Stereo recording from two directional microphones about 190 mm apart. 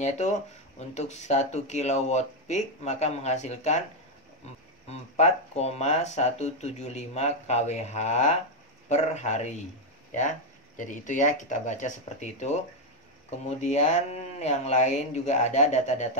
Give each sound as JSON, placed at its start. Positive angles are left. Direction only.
{"t": 0.0, "sound": "speech", "side_deg": 35}
{"t": 4.8, "sound": "speech", "side_deg": 35}
{"t": 10.8, "sound": "speech", "side_deg": 40}